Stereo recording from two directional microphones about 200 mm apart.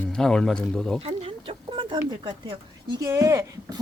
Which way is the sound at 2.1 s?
20° right (ahead or behind).